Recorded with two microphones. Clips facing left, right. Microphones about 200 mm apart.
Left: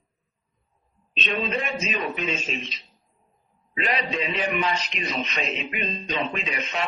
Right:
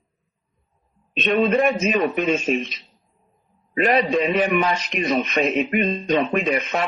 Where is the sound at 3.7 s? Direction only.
50° right (ahead or behind).